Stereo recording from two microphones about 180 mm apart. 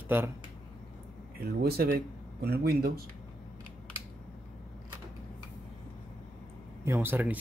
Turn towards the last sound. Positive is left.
turn(degrees=-10)  # may be behind; listen again after turning